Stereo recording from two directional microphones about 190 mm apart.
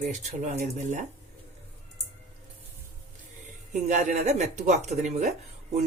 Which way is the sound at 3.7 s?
40° right (ahead or behind).